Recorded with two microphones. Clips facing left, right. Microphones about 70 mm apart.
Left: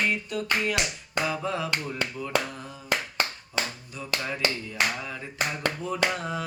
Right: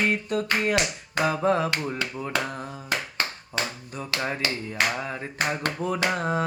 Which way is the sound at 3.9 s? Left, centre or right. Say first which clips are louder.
Right 2 dB; right.